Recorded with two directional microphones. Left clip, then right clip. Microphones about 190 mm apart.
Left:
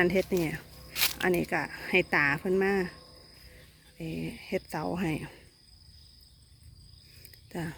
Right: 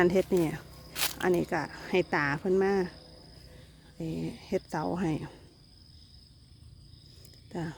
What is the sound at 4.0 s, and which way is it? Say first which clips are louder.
Speech: right 1 dB; 25° right (ahead or behind).